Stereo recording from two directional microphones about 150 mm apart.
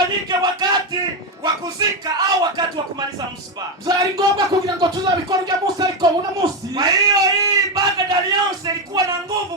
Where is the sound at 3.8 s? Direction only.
25° right (ahead or behind).